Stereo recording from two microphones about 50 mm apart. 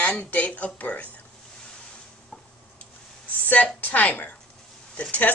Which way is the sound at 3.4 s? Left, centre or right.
Left.